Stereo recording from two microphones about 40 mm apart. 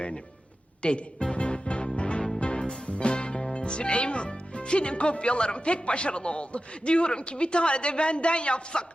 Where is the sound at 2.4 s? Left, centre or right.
Left.